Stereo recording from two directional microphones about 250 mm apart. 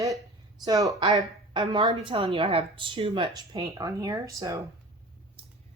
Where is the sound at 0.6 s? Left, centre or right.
Centre.